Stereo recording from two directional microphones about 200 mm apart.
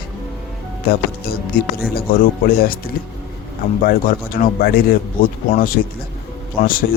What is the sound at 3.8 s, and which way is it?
Speech, 45° left (ahead or behind).